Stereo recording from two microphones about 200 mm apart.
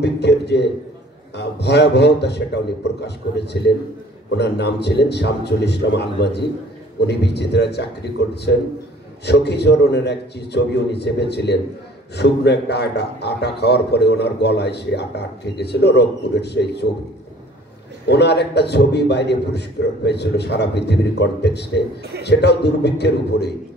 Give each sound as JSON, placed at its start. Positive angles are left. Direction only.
{"t": 0.0, "sound": "a man's voice", "side_deg": 60}
{"t": 18.0, "sound": "a man's voice", "side_deg": 55}